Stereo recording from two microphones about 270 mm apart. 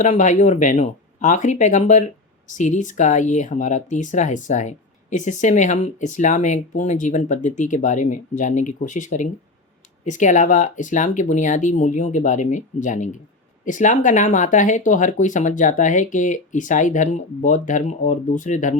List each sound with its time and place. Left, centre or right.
0.0 s speech: left